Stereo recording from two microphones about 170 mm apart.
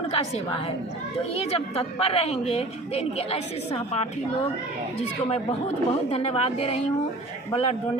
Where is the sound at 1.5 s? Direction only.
35° left (ahead or behind).